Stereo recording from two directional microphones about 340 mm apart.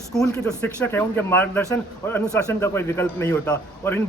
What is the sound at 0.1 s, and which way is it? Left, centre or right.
A man's voice, centre.